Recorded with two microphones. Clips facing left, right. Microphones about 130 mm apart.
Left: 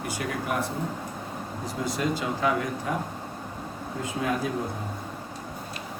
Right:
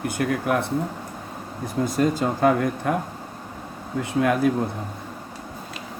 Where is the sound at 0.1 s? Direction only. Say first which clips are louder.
Right 6 dB; 55° right (ahead or behind).